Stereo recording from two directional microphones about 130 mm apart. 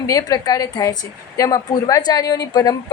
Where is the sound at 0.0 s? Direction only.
25° left (ahead or behind).